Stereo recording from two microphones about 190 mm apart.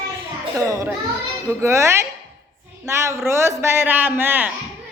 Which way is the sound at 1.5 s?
15° right (ahead or behind).